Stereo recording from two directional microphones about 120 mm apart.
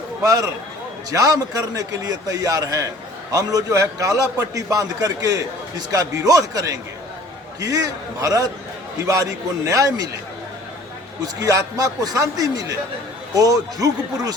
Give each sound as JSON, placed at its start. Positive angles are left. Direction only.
{"t": 0.2, "sound": "a man's voice", "side_deg": -30}
{"t": 11.3, "sound": "a man's voice", "side_deg": -30}